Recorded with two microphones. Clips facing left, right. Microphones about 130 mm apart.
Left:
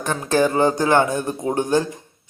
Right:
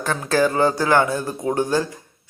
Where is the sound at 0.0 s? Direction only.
20° left (ahead or behind).